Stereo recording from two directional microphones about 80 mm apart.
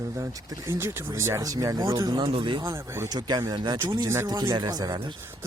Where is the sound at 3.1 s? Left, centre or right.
Right.